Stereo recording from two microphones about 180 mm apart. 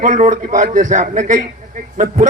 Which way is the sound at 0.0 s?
45° right (ahead or behind).